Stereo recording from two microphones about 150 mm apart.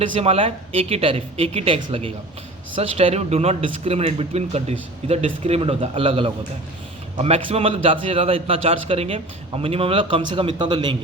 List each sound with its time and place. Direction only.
0.0 s a man's voice: 40° right (ahead or behind)